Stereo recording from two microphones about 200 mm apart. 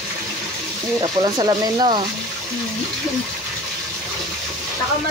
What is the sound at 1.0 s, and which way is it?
Speech, 20° right (ahead or behind).